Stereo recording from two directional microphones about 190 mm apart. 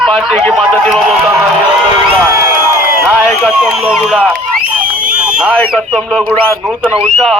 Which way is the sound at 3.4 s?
Centre (ahead or behind).